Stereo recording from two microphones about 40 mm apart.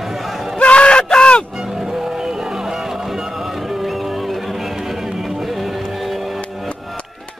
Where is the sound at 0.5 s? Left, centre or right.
Left.